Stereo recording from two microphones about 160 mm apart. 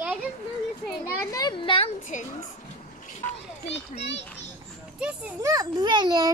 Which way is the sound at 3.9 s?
40° left (ahead or behind).